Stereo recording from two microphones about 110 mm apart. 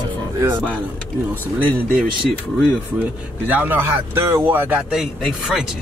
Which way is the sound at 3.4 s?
15° right (ahead or behind).